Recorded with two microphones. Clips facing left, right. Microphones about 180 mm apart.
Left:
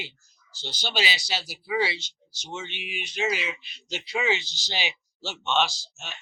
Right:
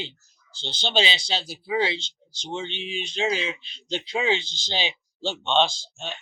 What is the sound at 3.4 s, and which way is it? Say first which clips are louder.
Speech: right 3 dB; 30° right (ahead or behind).